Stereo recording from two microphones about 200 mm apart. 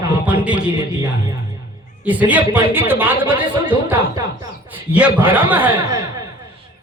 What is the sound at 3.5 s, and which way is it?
Speech, 25° right (ahead or behind).